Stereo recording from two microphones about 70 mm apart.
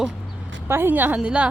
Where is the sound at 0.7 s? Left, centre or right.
Right.